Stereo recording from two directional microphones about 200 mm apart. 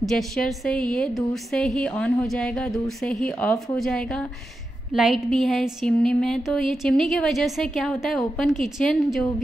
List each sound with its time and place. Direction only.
0.0 s speech: centre (ahead or behind)